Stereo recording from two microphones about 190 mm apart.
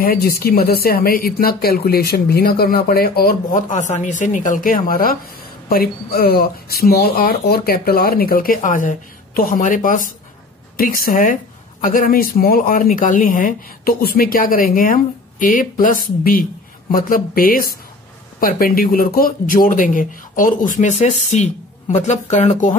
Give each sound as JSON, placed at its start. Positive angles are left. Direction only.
{"t": 0.0, "sound": "speech", "side_deg": 50}